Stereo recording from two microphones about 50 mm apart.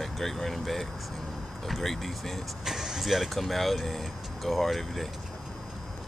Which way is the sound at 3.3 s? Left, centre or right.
Centre.